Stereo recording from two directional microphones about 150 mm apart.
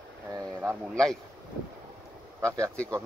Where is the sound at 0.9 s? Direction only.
5° left (ahead or behind).